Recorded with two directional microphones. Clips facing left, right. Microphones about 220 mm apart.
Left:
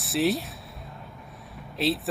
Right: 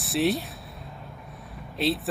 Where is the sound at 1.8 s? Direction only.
Centre (ahead or behind).